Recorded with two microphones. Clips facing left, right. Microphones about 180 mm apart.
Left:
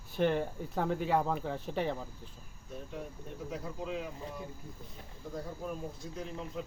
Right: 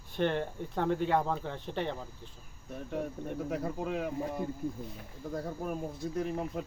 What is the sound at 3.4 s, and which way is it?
Speech, 55° right (ahead or behind).